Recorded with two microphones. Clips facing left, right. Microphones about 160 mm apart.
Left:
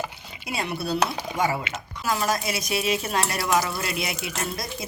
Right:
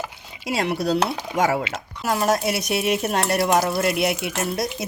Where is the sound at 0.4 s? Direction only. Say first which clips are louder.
Right 6 dB; 85° right.